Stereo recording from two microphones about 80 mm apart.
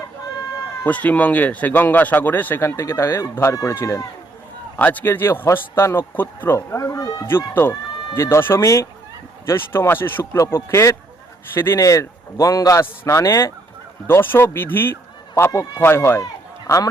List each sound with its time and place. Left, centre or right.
0.9 s speech: centre; by 3.8 s left
4.8 s speech: left
7.3 s speech: left
10.4 s speech: left
11.8 s a man's voice: left
16.6 s a man's voice: left